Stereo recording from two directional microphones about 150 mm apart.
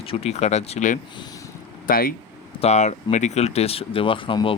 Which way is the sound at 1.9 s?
75° left (ahead or behind).